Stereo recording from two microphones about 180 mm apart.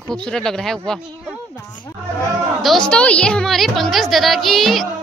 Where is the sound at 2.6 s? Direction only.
5° left (ahead or behind).